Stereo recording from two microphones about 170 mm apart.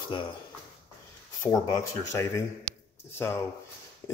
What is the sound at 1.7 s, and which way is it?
Speech, 20° left (ahead or behind).